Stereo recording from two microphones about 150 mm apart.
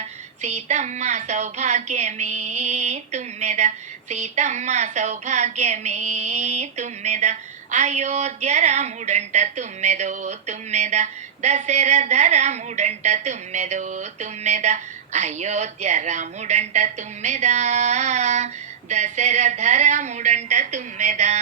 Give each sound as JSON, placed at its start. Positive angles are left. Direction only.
{"t": 0.0, "sound": "a woman's voice", "side_deg": -50}